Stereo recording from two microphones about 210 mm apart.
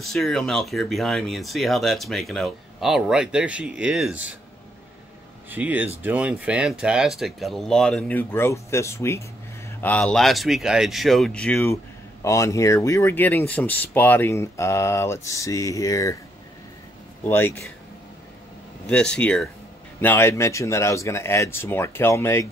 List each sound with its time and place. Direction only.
0.0 s speech: centre (ahead or behind)
5.5 s speech: 10° right (ahead or behind); by 16.2 s 15° left (ahead or behind)
17.2 s speech: 10° left (ahead or behind)
18.9 s speech: 5° left (ahead or behind)